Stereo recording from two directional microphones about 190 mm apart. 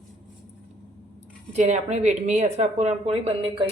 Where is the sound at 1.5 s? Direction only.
35° right (ahead or behind).